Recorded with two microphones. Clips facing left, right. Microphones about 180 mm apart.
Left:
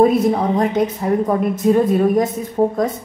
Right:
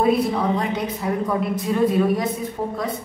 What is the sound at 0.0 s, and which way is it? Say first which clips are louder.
A woman's voice: left 5 dB; 45° left (ahead or behind).